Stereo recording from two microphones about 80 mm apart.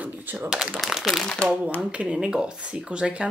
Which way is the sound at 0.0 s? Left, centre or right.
Right.